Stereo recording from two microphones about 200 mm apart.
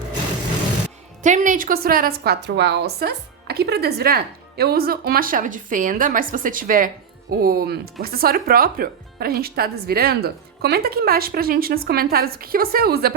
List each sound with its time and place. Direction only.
1.2 s a woman's voice: 40° right (ahead or behind)